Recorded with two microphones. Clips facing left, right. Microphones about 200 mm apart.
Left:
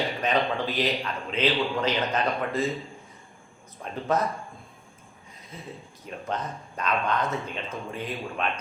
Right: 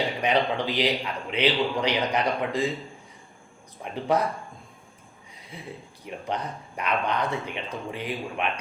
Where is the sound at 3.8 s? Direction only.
15° right (ahead or behind).